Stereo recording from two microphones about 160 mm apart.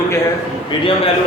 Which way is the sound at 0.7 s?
30° left (ahead or behind).